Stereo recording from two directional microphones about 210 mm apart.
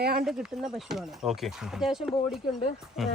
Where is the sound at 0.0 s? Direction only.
50° right (ahead or behind).